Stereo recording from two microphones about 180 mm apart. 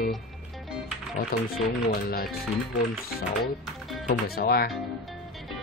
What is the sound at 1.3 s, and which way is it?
Speech, 55° left (ahead or behind).